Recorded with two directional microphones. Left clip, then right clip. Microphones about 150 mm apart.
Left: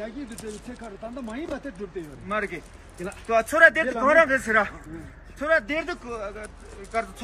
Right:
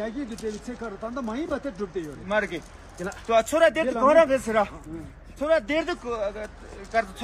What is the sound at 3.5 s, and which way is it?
A man's voice, centre (ahead or behind).